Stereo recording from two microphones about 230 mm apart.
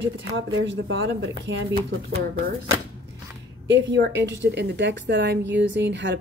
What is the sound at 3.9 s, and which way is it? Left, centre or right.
Speech, right.